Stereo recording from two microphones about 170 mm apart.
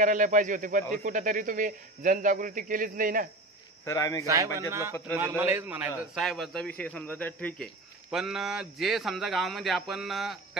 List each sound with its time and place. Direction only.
0.0 s speech: 50° right (ahead or behind)
3.8 s speech: 20° left (ahead or behind)
4.6 s a man's voice: 15° right (ahead or behind)